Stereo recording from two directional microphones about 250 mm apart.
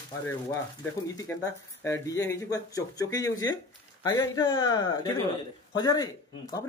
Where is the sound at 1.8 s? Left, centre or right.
Centre.